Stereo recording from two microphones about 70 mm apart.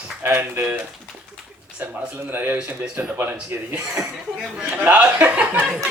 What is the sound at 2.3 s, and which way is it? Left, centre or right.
Speech, right.